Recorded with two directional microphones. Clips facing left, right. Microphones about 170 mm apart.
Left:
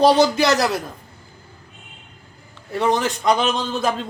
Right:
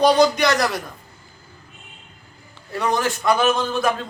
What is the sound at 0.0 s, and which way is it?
Speech, 30° left (ahead or behind).